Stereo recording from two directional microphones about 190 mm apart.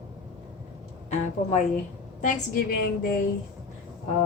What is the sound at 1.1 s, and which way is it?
Speech, 40° left (ahead or behind).